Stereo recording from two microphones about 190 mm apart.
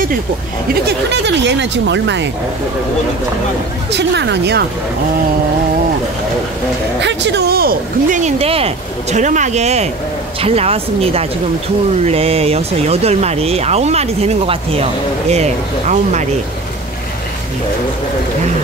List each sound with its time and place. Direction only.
0.8 s speech: 65° right (ahead or behind)
3.9 s speech: 65° right (ahead or behind)
7.0 s speech: 70° right (ahead or behind)
8.2 s speech: 30° right (ahead or behind)